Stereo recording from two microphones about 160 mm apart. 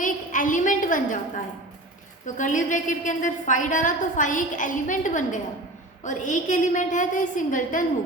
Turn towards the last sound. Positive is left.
turn(degrees=55)  # may be behind; listen again after turning